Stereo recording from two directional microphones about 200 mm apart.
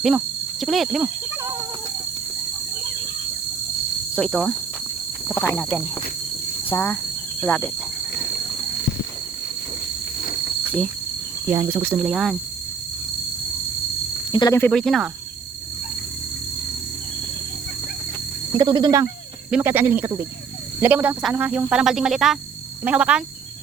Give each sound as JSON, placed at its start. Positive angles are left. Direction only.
{"t": 0.6, "sound": "speech", "side_deg": 0}
{"t": 4.1, "sound": "speech", "side_deg": 5}
{"t": 11.5, "sound": "speech", "side_deg": -15}
{"t": 12.0, "sound": "speech", "side_deg": 0}
{"t": 14.3, "sound": "speech", "side_deg": 15}
{"t": 14.7, "sound": "speech", "side_deg": 0}
{"t": 18.5, "sound": "speech", "side_deg": -25}
{"t": 19.5, "sound": "speech", "side_deg": -5}